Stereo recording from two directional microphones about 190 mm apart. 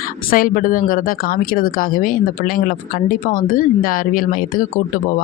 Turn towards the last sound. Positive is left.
turn(degrees=45)  # may be behind; listen again after turning